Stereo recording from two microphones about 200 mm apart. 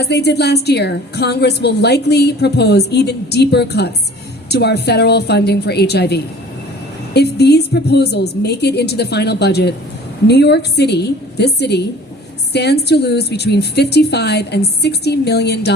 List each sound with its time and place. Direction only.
0.0 s a woman's voice: 55° left (ahead or behind)